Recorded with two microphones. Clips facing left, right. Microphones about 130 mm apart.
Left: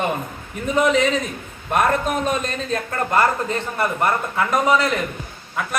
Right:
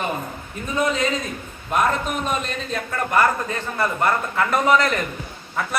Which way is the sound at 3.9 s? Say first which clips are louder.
Even; 10° left (ahead or behind).